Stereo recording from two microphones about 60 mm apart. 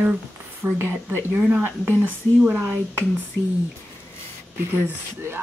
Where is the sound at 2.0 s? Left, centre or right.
Right.